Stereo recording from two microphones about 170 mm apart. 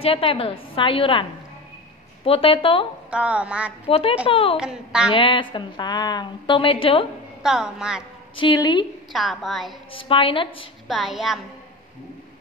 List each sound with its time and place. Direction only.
0.0 s a woman's voice: 35° left (ahead or behind)
2.2 s a woman's voice: 35° left (ahead or behind)
3.1 s a sound: 5° right (ahead or behind)
3.8 s a woman's voice: 35° left (ahead or behind)
4.6 s a woman's voice: 5° right (ahead or behind)
5.1 s a woman's voice: 30° left (ahead or behind)
7.4 s a woman's voice: 5° right (ahead or behind)
8.4 s a woman's voice: 25° left (ahead or behind)
9.1 s a woman's voice: centre (ahead or behind)
9.9 s a woman's voice: 30° left (ahead or behind)
10.9 s a woman's voice: centre (ahead or behind)